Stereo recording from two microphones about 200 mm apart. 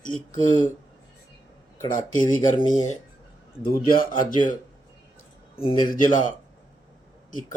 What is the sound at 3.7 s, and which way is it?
Speech, 45° left (ahead or behind).